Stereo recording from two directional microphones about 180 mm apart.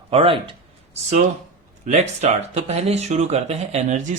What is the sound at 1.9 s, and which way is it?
Speech, 40° right (ahead or behind).